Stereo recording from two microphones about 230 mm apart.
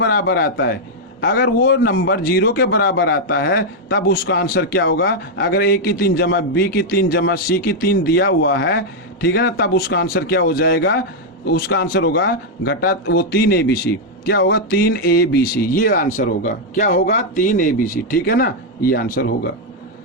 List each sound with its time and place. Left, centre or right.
0.0 s a man's voice: left